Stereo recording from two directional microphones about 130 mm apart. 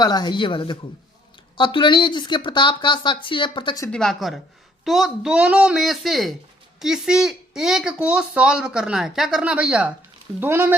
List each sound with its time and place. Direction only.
0.0 s speech: 30° left (ahead or behind)
3.9 s speech: centre (ahead or behind); by 10.8 s 15° right (ahead or behind)